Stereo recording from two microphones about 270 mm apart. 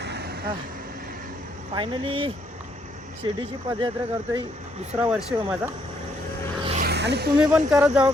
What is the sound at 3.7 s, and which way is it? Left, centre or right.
Speech, centre.